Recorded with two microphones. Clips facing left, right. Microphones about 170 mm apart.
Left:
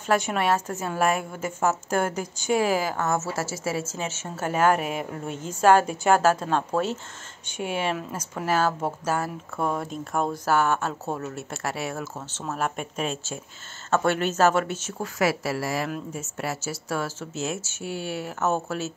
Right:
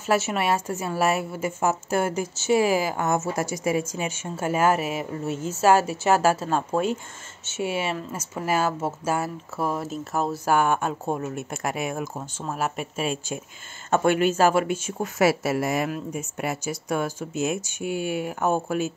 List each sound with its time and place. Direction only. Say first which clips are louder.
0.0 s a woman's voice: even; 5° right (ahead or behind)
15.1 s a woman's voice: right 4 dB; 25° right (ahead or behind)